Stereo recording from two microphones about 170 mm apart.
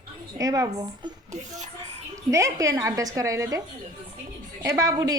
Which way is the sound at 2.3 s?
20° right (ahead or behind).